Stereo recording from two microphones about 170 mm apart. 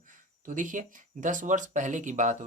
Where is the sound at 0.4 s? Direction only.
50° right (ahead or behind).